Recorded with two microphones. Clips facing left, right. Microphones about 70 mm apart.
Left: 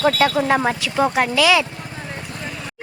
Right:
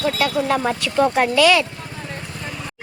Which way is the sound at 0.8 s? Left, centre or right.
Centre.